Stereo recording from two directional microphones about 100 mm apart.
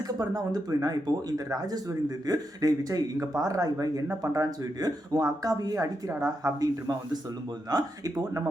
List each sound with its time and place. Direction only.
0.2 s speech: 35° right (ahead or behind)